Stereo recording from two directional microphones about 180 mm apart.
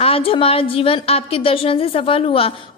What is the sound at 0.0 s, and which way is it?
A woman's voice, 30° left (ahead or behind).